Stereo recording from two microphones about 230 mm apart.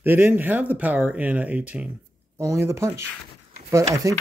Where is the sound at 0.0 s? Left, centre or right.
Centre.